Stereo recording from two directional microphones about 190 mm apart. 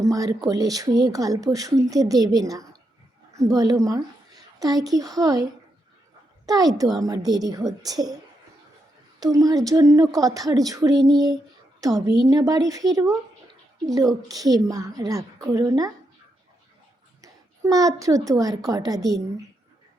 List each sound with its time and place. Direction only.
0.0 s a woman's voice: 20° right (ahead or behind)
6.4 s a sound: 20° right (ahead or behind)
7.0 s speech: 20° right (ahead or behind)
9.2 s speech: 20° right (ahead or behind)
17.2 s a woman's voice: 20° right (ahead or behind)